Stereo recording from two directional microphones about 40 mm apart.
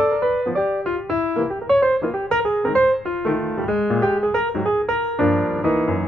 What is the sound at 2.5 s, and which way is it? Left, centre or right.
Music, left.